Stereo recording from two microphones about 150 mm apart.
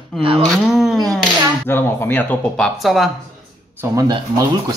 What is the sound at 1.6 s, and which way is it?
Speech, 15° left (ahead or behind).